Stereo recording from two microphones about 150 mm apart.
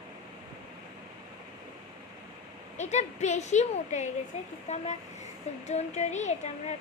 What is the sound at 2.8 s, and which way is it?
A woman's voice, 50° left (ahead or behind).